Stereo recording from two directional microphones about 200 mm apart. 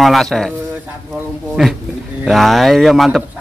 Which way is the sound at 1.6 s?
Centre (ahead or behind).